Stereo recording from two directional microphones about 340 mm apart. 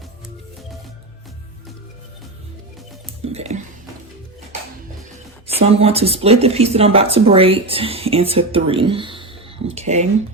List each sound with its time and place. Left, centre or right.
3.3 s speech: centre
5.5 s speech: centre